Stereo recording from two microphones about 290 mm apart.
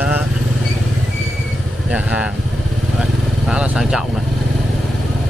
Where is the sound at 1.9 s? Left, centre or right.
Centre.